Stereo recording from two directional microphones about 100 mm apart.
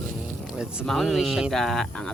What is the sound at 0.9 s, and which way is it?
Speech, centre (ahead or behind).